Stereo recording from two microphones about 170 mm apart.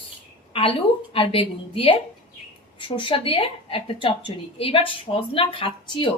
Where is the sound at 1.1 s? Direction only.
35° left (ahead or behind).